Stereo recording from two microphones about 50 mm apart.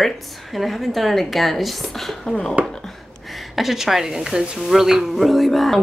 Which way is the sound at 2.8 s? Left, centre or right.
Centre.